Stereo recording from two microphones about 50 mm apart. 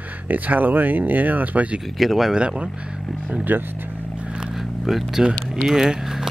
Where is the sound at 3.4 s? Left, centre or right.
Right.